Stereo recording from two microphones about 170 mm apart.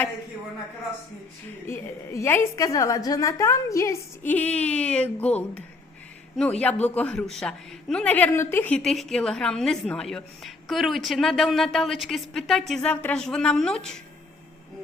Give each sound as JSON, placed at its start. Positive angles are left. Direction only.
{"t": 1.6, "sound": "a woman's voice", "side_deg": 15}